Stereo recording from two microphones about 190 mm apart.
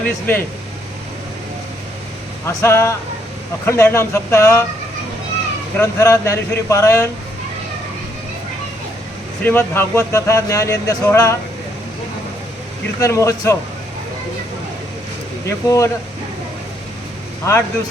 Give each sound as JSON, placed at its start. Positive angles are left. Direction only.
{"t": 0.0, "sound": "speech", "side_deg": 10}
{"t": 2.5, "sound": "speech", "side_deg": 15}
{"t": 5.8, "sound": "speech", "side_deg": 15}
{"t": 9.4, "sound": "speech", "side_deg": 10}
{"t": 13.0, "sound": "speech", "side_deg": 15}
{"t": 15.4, "sound": "speech", "side_deg": 15}
{"t": 17.5, "sound": "speech", "side_deg": 15}